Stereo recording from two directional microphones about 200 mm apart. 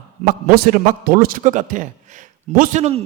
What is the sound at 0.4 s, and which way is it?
A man's voice, 45° right (ahead or behind).